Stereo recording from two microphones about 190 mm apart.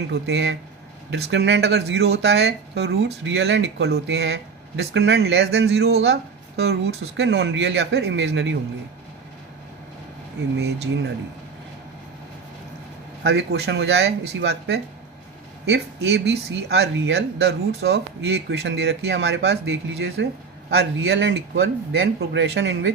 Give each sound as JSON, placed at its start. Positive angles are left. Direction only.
{"t": 0.1, "sound": "speech", "side_deg": -65}
{"t": 13.2, "sound": "speech", "side_deg": -60}